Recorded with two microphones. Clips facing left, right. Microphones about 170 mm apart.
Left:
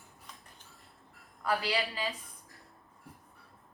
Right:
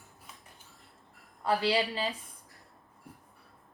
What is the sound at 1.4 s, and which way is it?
Speech, 30° right (ahead or behind).